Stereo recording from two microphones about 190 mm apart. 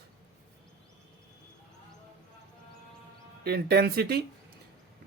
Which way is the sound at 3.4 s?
55° right (ahead or behind).